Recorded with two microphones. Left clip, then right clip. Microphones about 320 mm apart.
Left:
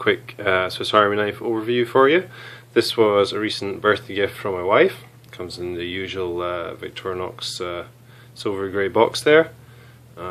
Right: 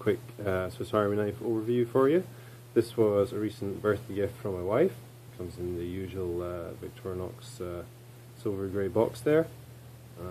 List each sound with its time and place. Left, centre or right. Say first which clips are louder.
0.0 s speech: left 10 dB; centre